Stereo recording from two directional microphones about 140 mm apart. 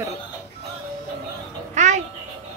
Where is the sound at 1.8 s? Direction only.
55° right (ahead or behind).